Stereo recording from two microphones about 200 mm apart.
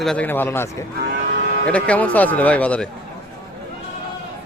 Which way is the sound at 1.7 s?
5° left (ahead or behind).